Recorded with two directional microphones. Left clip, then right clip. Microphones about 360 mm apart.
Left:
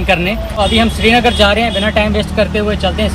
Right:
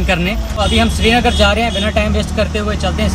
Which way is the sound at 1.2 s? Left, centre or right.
Centre.